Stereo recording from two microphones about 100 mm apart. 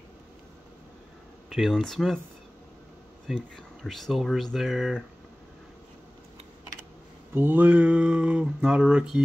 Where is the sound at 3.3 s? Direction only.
5° left (ahead or behind).